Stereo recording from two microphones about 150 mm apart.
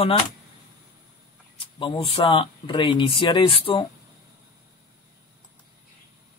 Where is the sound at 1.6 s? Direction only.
35° left (ahead or behind).